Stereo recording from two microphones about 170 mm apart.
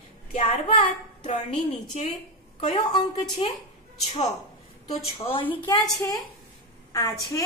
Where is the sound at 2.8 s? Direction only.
30° left (ahead or behind).